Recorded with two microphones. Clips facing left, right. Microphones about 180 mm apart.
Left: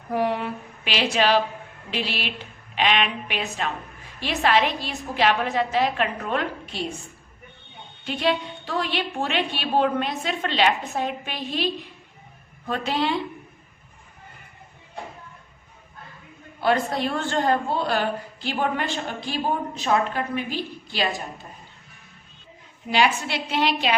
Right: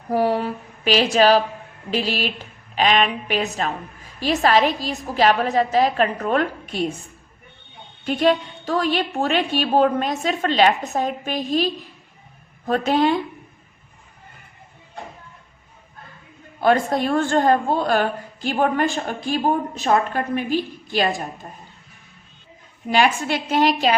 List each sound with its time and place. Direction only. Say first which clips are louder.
0.1 s a sound: right 4 dB; 35° right (ahead or behind)
1.9 s a woman's voice: right 6 dB; 40° right (ahead or behind)
8.0 s a woman's voice: right 6 dB; 45° right (ahead or behind)
16.6 s a woman's voice: right 4 dB; 45° right (ahead or behind)
22.9 s a woman's voice: right 3 dB; 50° right (ahead or behind)